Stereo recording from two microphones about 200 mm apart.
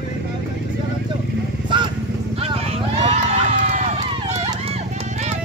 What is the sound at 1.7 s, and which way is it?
Vehicle, 25° right (ahead or behind).